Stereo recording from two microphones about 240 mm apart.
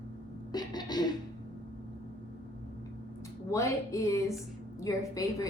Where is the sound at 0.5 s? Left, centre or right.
Centre.